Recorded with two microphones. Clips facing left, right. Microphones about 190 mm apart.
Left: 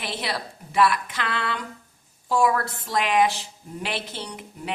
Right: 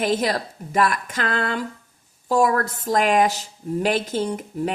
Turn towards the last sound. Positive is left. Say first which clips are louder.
# right 8 dB
turn(degrees=-45)  # may be behind; listen again after turning